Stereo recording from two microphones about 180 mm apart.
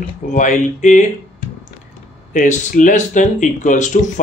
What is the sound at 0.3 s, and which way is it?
Speech, 45° left (ahead or behind).